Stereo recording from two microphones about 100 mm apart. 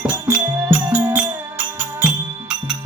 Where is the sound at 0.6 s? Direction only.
20° right (ahead or behind).